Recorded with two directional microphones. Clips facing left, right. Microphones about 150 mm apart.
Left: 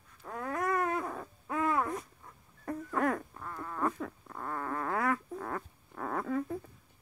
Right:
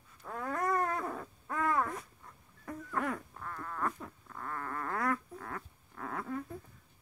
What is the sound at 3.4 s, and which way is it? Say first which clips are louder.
Insect: left 3 dB; 10° left (ahead or behind).